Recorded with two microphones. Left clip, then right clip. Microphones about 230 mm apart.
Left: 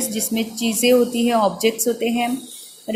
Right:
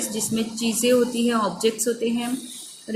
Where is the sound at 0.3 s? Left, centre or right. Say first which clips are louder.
Left 3 dB; left.